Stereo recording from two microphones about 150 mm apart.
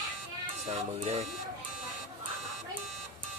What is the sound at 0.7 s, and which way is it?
Speech, 45° right (ahead or behind).